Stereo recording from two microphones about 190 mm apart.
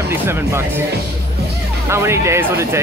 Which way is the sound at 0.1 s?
10° right (ahead or behind).